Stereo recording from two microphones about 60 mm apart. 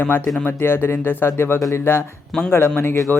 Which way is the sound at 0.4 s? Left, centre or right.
Left.